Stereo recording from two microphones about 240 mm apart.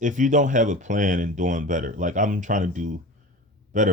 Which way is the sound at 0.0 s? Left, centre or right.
Right.